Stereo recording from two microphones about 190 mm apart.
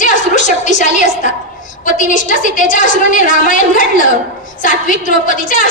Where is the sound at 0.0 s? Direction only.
40° left (ahead or behind).